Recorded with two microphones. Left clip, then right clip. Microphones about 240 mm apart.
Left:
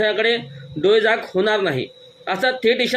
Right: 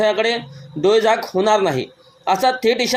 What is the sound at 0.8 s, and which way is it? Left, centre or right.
Speech, right.